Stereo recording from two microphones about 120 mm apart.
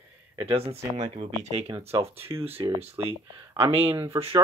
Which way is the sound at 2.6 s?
35° right (ahead or behind).